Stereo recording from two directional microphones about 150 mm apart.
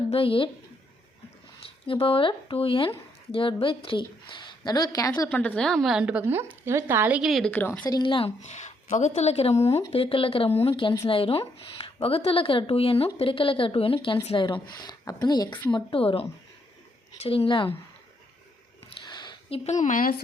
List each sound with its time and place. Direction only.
0.1 s a woman's voice: 35° left (ahead or behind)
1.9 s a woman's voice: 35° left (ahead or behind)
5.3 s a woman's voice: 10° left (ahead or behind); by 7.2 s 15° right (ahead or behind)
7.2 s speech: centre (ahead or behind)
7.5 s speech: 10° left (ahead or behind)
7.9 s a woman's voice: 30° left (ahead or behind)
8.4 s a woman's voice: 50° left (ahead or behind)
17.2 s a woman's voice: 35° left (ahead or behind)
18.9 s a sound: 30° left (ahead or behind); by 20.2 s 70° left (ahead or behind)